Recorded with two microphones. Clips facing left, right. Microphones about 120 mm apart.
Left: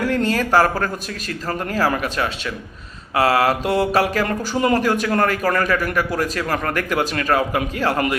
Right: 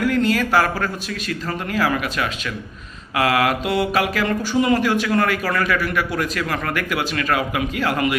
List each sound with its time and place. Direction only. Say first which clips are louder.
0.0 s mantra: right 1 dB; 40° left (ahead or behind)